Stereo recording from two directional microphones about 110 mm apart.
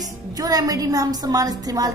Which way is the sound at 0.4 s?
35° right (ahead or behind).